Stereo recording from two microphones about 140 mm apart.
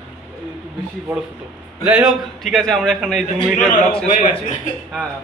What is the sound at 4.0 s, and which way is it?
Speech, 60° left (ahead or behind).